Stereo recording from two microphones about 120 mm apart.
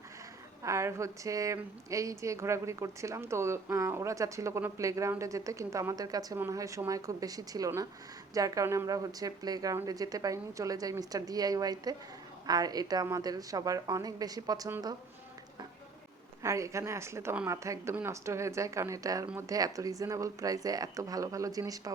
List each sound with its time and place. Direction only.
0.6 s a woman's voice: 25° right (ahead or behind)
16.4 s a woman's voice: 25° right (ahead or behind)